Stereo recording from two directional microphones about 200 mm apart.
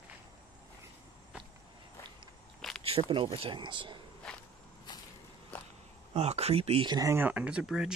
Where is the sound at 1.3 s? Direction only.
5° right (ahead or behind).